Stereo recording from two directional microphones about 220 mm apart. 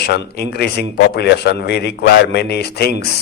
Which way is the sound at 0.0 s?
45° left (ahead or behind).